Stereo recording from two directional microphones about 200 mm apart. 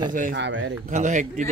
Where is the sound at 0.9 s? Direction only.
35° right (ahead or behind).